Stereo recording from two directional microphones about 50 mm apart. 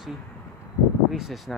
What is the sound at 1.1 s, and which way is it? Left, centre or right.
Speech, centre.